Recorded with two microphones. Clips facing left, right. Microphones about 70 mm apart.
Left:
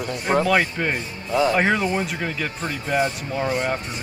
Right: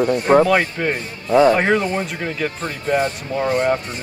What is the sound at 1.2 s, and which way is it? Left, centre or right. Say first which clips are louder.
Speech: right 8 dB; right.